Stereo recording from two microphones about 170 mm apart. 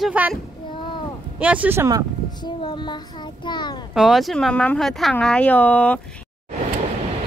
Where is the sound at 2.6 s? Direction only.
25° left (ahead or behind).